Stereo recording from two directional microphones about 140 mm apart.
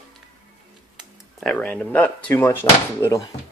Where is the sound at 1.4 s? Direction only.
10° left (ahead or behind).